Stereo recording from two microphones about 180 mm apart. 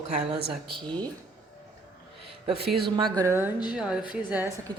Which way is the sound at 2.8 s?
25° right (ahead or behind).